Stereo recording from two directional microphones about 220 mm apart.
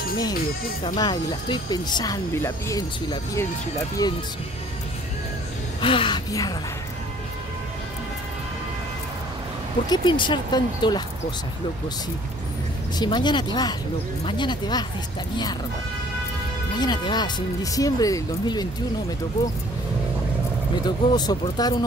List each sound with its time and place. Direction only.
0.8 s speech: 20° left (ahead or behind)
5.8 s speech: 25° left (ahead or behind)
9.8 s speech: 20° left (ahead or behind)
12.9 s speech: 20° left (ahead or behind)
16.7 s speech: 20° left (ahead or behind)
20.7 s speech: 20° left (ahead or behind)